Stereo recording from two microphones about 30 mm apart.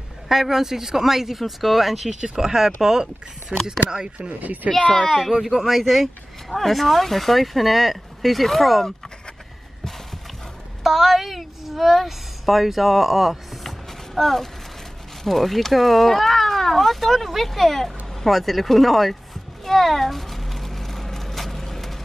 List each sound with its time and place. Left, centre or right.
0.3 s a woman's voice: centre
2.1 s speech: right
4.6 s speech: right
5.4 s a woman's voice: centre
10.8 s a woman's voice: centre
13.7 s a sound: centre
15.2 s a woman's voice: centre
19.6 s a sound: centre